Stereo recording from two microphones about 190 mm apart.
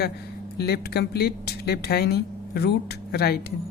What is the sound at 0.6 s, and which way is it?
Speech, 55° left (ahead or behind).